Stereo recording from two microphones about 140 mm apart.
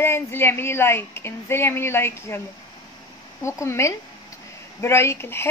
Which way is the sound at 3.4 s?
20° left (ahead or behind).